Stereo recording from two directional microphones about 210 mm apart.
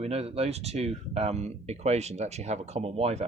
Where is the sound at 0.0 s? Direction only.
30° right (ahead or behind).